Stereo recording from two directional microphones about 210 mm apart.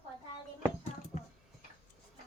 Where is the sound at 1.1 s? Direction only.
35° left (ahead or behind).